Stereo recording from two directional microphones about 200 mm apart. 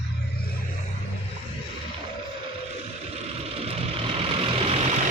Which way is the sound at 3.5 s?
30° right (ahead or behind).